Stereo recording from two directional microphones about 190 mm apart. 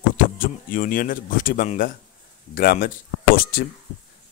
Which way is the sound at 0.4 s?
50° left (ahead or behind).